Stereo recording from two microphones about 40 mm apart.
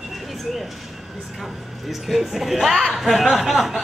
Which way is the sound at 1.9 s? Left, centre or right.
Centre.